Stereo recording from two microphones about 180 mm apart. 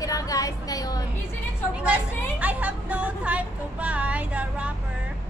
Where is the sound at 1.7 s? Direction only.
5° right (ahead or behind).